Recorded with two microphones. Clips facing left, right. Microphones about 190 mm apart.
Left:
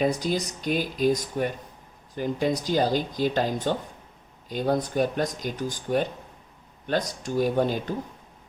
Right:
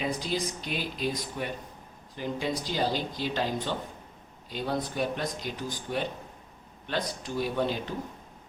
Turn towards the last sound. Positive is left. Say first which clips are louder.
# left 5 dB
turn(degrees=45)  # may be behind; listen again after turning